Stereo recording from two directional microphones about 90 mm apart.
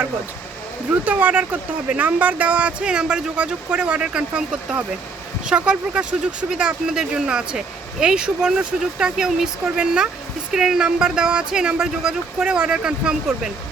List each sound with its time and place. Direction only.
1.0 s speech: 15° right (ahead or behind)